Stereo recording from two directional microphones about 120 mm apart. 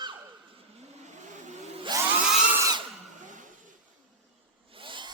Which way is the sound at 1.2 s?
80° right.